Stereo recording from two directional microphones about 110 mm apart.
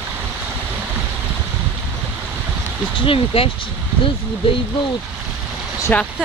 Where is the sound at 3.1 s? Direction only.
55° left (ahead or behind).